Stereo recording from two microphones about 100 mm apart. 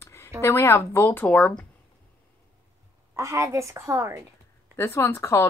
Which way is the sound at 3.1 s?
30° right (ahead or behind).